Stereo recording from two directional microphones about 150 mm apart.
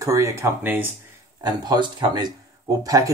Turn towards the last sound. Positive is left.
turn(degrees=-25)  # may be behind; listen again after turning